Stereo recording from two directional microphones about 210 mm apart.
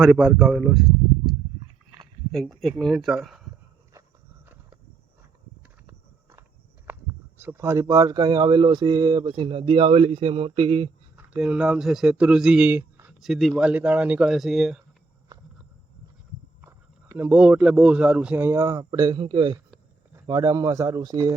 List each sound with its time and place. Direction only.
0.0 s speech: centre (ahead or behind)
2.3 s speech: centre (ahead or behind)
6.9 s a sound: 5° right (ahead or behind)
7.3 s speech: 10° right (ahead or behind); by 10.9 s 25° right (ahead or behind)
11.2 s speech: 5° right (ahead or behind)
16.6 s speech: 10° right (ahead or behind)